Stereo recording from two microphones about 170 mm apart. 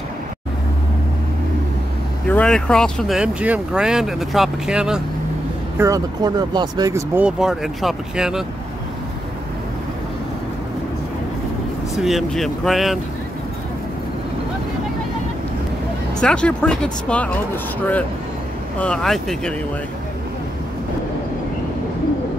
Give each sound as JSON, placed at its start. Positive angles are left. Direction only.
{"t": 2.2, "sound": "speech", "side_deg": 5}
{"t": 5.8, "sound": "speech", "side_deg": -20}
{"t": 7.2, "sound": "speech", "side_deg": -5}
{"t": 11.9, "sound": "speech", "side_deg": 0}
{"t": 16.2, "sound": "speech", "side_deg": 5}
{"t": 18.8, "sound": "speech", "side_deg": 5}